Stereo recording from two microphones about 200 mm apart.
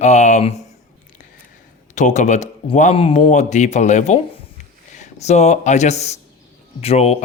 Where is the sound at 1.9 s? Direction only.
35° left (ahead or behind).